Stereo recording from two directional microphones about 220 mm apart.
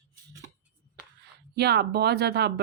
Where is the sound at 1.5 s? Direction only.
50° right (ahead or behind).